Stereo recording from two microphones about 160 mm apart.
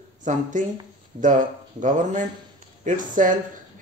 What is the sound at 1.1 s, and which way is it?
Speech, 50° right (ahead or behind).